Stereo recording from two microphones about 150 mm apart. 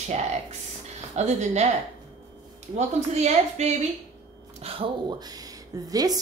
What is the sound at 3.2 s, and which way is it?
A woman's voice, 45° right (ahead or behind).